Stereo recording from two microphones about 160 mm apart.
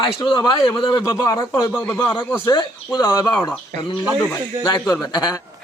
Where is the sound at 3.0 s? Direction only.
20° left (ahead or behind).